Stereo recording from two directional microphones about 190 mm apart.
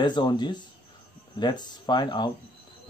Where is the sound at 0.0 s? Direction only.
25° left (ahead or behind).